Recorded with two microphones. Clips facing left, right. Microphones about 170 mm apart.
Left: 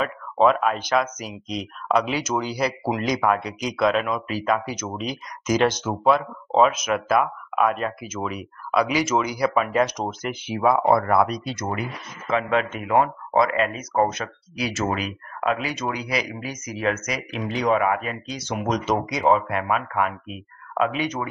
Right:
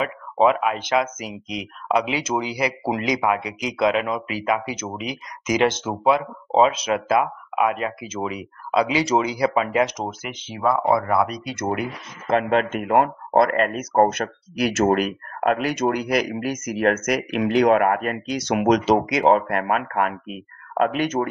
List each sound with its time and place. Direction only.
0.4 s speech: 15° right (ahead or behind)
6.7 s speech: 30° right (ahead or behind)
10.4 s speech: 10° left (ahead or behind)
10.9 s speech: 5° right (ahead or behind)
11.7 s speech: 55° right (ahead or behind); by 18.8 s 75° right (ahead or behind)
19.1 s speech: 55° right (ahead or behind)